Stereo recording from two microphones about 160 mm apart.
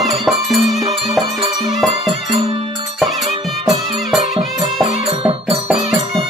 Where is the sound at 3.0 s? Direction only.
Centre (ahead or behind).